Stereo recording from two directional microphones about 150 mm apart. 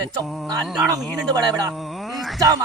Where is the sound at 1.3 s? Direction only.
25° right (ahead or behind).